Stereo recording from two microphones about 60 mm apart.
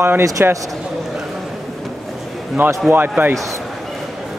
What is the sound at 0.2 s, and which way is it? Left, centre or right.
Speech, right.